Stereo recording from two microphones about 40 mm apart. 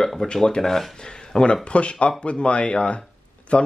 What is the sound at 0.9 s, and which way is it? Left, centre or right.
Speech, centre.